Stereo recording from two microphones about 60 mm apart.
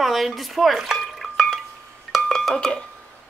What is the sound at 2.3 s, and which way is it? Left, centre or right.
Speech, centre.